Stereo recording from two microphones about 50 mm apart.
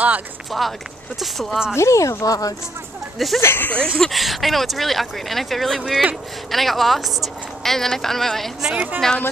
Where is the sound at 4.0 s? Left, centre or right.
Centre.